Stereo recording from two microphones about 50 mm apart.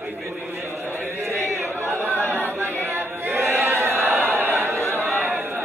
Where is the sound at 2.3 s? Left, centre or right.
Right.